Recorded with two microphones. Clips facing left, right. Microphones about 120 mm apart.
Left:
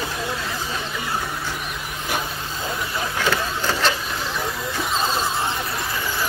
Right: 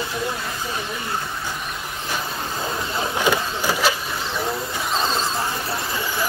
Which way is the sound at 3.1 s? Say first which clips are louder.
Right 2 dB; 15° right (ahead or behind).